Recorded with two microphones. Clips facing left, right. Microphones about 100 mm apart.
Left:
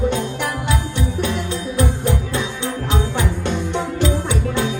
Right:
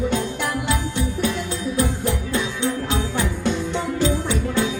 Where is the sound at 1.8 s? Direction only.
25° left (ahead or behind).